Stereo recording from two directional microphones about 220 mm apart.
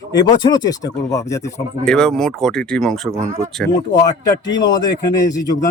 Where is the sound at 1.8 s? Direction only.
5° left (ahead or behind).